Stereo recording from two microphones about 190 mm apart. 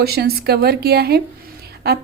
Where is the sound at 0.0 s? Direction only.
55° right (ahead or behind).